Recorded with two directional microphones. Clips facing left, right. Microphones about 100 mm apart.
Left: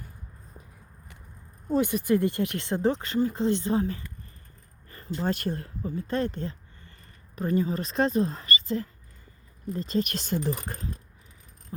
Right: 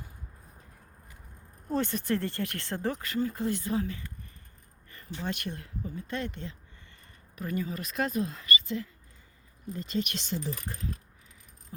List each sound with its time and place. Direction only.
1.7 s speech: 10° left (ahead or behind); by 10.5 s 50° left (ahead or behind)